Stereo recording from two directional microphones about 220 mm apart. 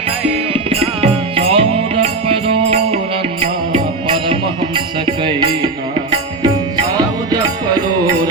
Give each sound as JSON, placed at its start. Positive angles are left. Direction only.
{"t": 0.5, "sound": "music", "side_deg": -25}
{"t": 4.3, "sound": "music", "side_deg": -20}